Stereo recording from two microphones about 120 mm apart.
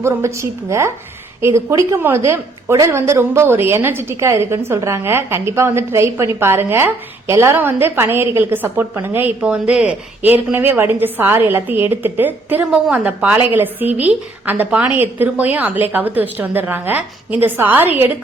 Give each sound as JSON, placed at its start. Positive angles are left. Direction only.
{"t": 0.0, "sound": "a woman's voice", "side_deg": -25}